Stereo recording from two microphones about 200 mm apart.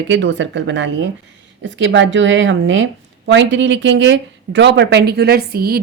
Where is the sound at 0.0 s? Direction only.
65° right (ahead or behind).